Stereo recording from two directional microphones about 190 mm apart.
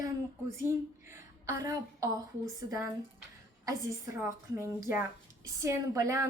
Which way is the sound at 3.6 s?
15° right (ahead or behind).